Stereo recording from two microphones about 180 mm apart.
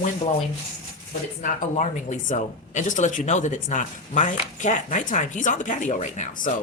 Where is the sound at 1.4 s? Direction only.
45° left (ahead or behind).